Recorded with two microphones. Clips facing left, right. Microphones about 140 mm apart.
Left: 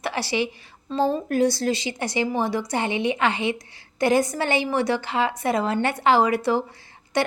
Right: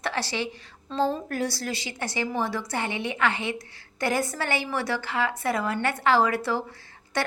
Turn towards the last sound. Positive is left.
turn(degrees=15)  # may be behind; listen again after turning